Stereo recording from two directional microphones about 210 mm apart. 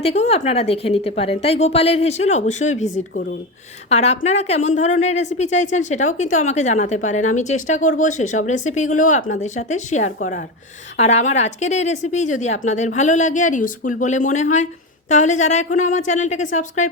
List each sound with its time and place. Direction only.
0.0 s a woman's voice: 30° left (ahead or behind)
2.9 s speech: 50° left (ahead or behind)
3.8 s speech: 30° left (ahead or behind)